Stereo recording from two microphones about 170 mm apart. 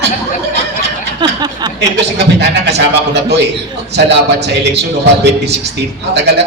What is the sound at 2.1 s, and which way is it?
A man's voice, 80° right.